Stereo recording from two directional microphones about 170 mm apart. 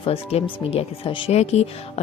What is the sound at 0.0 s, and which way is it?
Speech, 35° left (ahead or behind).